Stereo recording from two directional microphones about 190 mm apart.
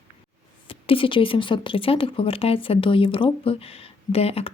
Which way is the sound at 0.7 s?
30° left (ahead or behind).